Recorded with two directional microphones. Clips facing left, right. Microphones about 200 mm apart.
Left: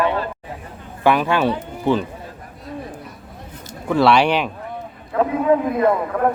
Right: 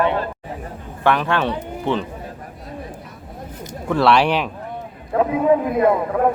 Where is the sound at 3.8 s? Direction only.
Centre (ahead or behind).